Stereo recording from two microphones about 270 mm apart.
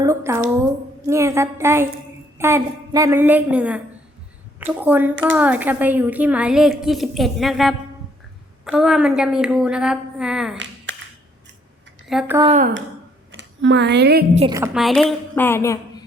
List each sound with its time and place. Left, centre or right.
0.0 s a woman's voice: centre
10.9 s crushing: right
12.0 s a woman's voice: centre
12.4 s speech: right
13.3 s speech: right
14.3 s speech: centre
14.6 s a woman's voice: centre